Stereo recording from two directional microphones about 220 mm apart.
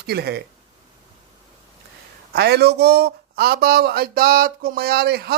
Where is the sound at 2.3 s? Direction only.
50° right (ahead or behind).